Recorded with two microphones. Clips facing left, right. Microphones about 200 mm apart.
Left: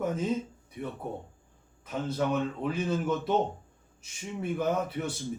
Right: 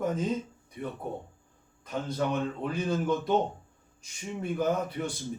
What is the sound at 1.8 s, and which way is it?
A man's voice, 5° left (ahead or behind).